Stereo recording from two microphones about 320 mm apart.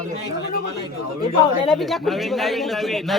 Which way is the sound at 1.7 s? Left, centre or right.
Centre.